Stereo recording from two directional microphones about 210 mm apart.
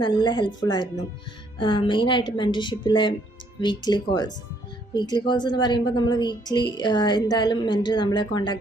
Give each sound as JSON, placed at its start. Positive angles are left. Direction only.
{"t": 0.0, "sound": "a woman's voice", "side_deg": 20}